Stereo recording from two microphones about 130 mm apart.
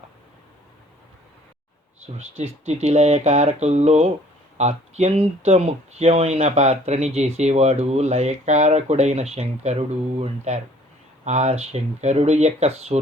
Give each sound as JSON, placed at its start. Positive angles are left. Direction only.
{"t": 2.1, "sound": "speech", "side_deg": -60}